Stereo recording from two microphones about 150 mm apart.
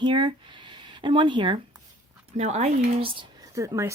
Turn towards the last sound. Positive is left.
turn(degrees=-20)  # may be behind; listen again after turning